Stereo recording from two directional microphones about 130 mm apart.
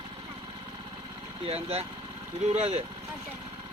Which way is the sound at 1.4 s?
50° right (ahead or behind).